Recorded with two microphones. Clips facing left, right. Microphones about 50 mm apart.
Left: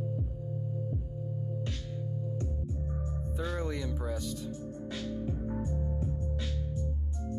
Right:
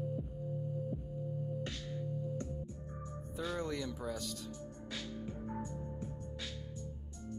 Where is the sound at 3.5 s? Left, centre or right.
Centre.